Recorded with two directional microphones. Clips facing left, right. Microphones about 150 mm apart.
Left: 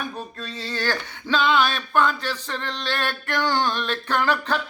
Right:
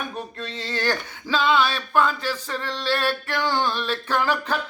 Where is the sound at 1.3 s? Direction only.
5° right (ahead or behind).